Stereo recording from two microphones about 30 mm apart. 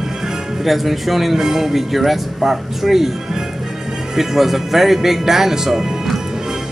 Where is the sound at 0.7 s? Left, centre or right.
Centre.